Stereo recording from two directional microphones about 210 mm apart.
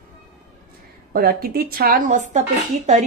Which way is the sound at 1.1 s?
45° right (ahead or behind).